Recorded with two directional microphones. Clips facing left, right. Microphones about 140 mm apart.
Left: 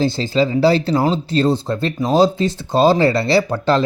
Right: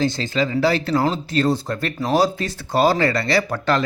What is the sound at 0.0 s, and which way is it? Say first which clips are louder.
Speech: left 4 dB; 30° left (ahead or behind).